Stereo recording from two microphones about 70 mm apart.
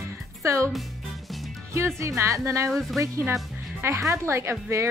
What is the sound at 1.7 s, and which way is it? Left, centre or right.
Speech, right.